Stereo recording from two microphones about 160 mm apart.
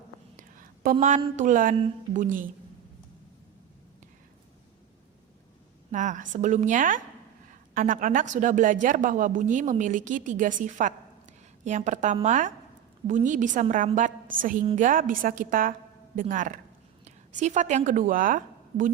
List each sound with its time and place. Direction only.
0.3 s whispering: 60° right (ahead or behind)
0.9 s a woman's voice: 50° right (ahead or behind)
5.9 s a woman's voice: 50° right (ahead or behind)